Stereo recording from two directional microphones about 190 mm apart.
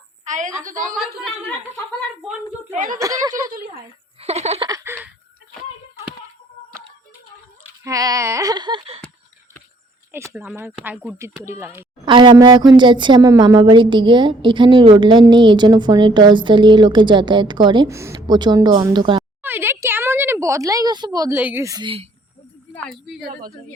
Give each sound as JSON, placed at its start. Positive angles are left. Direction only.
{"t": 0.3, "sound": "a woman's voice", "side_deg": -40}
{"t": 0.9, "sound": "a woman's voice", "side_deg": 5}
{"t": 2.7, "sound": "a woman's voice", "side_deg": -45}
{"t": 3.0, "sound": "speech", "side_deg": -20}
{"t": 4.2, "sound": "giggle", "side_deg": -35}
{"t": 4.7, "sound": "a sound", "side_deg": -15}
{"t": 7.9, "sound": "a woman's voice", "side_deg": -20}
{"t": 10.1, "sound": "speech", "side_deg": -10}
{"t": 12.0, "sound": "a woman's voice", "side_deg": -25}
{"t": 19.4, "sound": "speech", "side_deg": -10}
{"t": 22.7, "sound": "a woman's voice", "side_deg": 0}